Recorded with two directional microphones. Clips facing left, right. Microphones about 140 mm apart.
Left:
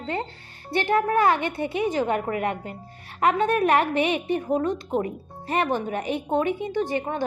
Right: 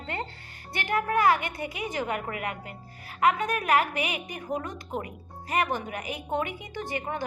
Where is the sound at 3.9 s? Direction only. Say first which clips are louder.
Left 8 dB; 10° right (ahead or behind).